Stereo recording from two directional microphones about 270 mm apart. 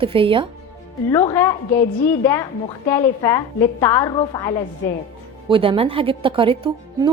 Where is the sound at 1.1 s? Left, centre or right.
Centre.